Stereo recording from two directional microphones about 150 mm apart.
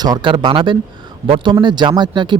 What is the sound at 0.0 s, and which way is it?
A man's voice, 30° right (ahead or behind).